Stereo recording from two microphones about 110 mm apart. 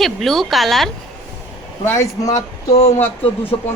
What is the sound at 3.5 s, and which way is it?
Speech, 55° left (ahead or behind).